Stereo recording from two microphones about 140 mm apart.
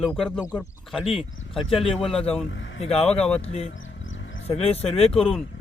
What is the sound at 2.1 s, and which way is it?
Speech, 45° left (ahead or behind).